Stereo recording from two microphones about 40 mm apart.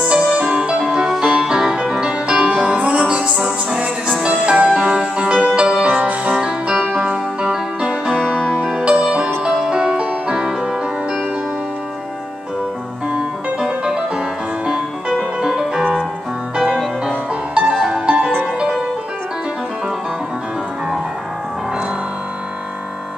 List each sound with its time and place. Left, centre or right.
0.1 s music: right
0.8 s music: centre
5.9 s music: right
6.4 s music: centre
6.9 s music: right
8.1 s music: centre
13.1 s music: centre
17.6 s music: centre
17.9 s music: right